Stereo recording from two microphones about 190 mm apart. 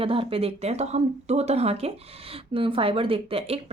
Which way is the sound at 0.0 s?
30° right (ahead or behind).